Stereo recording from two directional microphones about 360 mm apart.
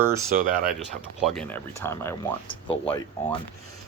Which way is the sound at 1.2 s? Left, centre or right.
Centre.